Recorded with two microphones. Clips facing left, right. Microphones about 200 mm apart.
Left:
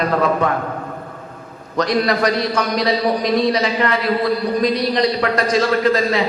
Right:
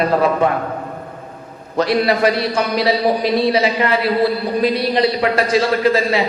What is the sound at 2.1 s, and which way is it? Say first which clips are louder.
A man's voice: right 2 dB; 30° right (ahead or behind).